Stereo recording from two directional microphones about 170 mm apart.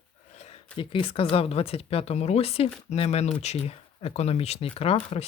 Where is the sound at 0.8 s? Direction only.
30° left (ahead or behind).